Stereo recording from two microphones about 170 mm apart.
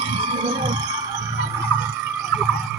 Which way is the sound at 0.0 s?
30° right (ahead or behind).